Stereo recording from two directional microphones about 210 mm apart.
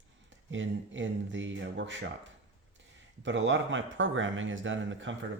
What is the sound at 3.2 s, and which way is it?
Speech, 60° right (ahead or behind).